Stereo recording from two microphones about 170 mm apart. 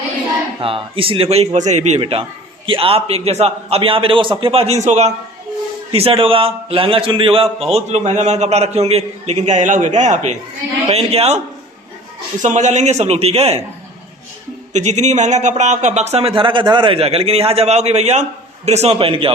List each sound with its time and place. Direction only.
0.6 s speech: 30° right (ahead or behind)
12.4 s speech: 45° right (ahead or behind)
14.7 s speech: 45° right (ahead or behind)